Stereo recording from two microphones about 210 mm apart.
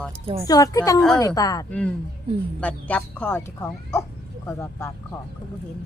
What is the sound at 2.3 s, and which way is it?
Speech, 25° right (ahead or behind).